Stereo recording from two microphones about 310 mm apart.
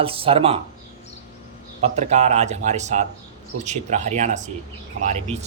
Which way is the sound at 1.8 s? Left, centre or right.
Right.